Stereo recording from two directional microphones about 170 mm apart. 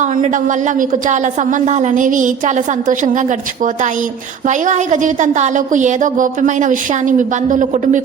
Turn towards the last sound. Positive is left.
turn(degrees=-50)  # may be behind; listen again after turning